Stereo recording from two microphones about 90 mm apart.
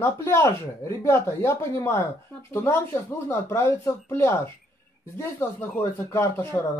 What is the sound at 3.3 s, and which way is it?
Speech, 30° left (ahead or behind).